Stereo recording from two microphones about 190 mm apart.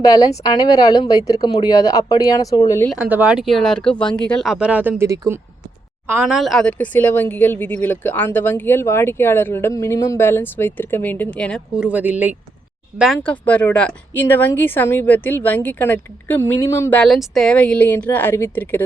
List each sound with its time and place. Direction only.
0.0 s speech: 20° left (ahead or behind)
2.9 s speech: 5° right (ahead or behind)
6.2 s speech: centre (ahead or behind)
11.9 s speech: 10° right (ahead or behind)
13.1 s speech: 10° left (ahead or behind)